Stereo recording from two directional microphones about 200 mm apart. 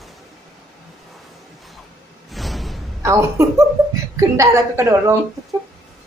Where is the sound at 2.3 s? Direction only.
Centre (ahead or behind).